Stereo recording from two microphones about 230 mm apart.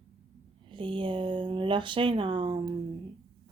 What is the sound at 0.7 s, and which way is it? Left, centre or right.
Speech, right.